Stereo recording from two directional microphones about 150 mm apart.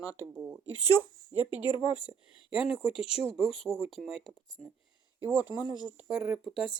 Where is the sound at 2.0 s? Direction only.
5° right (ahead or behind).